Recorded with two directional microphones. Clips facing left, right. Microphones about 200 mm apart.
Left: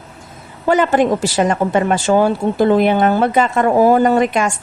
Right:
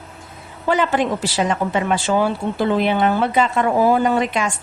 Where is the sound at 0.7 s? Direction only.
45° left (ahead or behind).